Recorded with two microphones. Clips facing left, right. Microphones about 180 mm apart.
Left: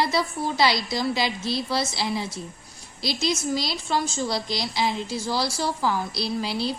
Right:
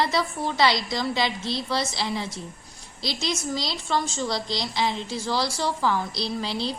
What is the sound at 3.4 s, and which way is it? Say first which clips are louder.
A woman's voice: left 2 dB; 10° left (ahead or behind).